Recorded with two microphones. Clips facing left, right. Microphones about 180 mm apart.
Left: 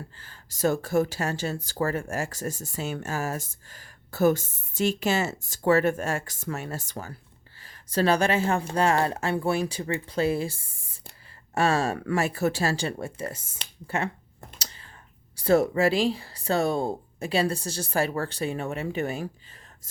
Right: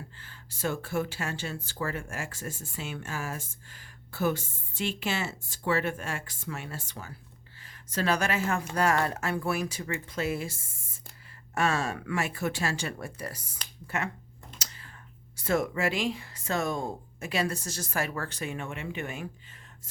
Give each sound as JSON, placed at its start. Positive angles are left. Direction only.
{"t": 0.2, "sound": "speech", "side_deg": 40}
{"t": 14.6, "sound": "whispering", "side_deg": 30}
{"t": 15.4, "sound": "speech", "side_deg": 35}